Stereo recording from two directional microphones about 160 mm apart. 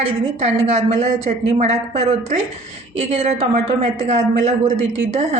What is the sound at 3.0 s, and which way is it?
A woman's voice, 45° right (ahead or behind).